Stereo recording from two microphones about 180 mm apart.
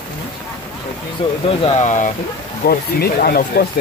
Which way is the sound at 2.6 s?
55° left (ahead or behind).